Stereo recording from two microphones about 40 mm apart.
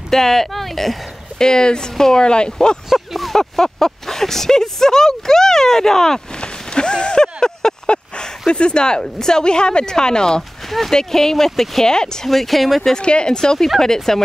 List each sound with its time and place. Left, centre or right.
0.1 s speech: centre
1.4 s speech: centre
2.9 s speech: centre
6.4 s rain: left
7.3 s speech: centre
10.7 s speech: centre
11.9 s speech: centre
12.3 s speech: centre
13.0 s speech: left